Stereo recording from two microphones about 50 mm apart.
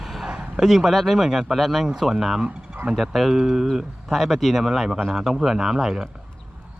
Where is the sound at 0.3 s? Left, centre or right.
Centre.